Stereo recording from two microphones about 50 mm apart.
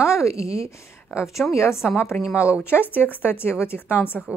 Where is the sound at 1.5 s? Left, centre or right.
Left.